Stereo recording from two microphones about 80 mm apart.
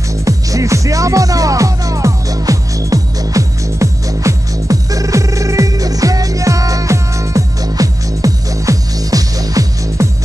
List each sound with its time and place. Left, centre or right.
0.2 s music: right